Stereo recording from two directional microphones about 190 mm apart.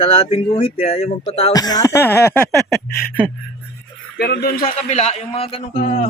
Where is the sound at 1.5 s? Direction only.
20° left (ahead or behind).